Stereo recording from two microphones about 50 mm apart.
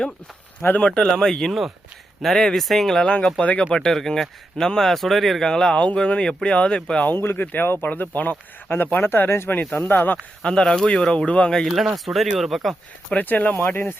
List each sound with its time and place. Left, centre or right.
0.8 s speech: centre
3.0 s speech: left
3.7 s speech: centre
5.5 s speech: centre
7.0 s speech: left
7.9 s speech: left
10.4 s speech: centre
11.9 s speech: centre
13.1 s speech: left
13.6 s speech: left